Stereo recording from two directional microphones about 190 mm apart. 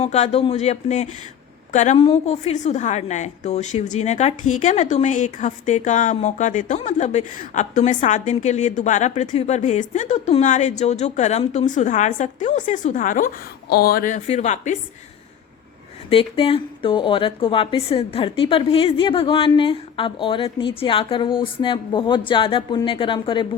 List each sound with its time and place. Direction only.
0.0 s a woman's voice: 35° left (ahead or behind)
16.0 s speech: 30° left (ahead or behind)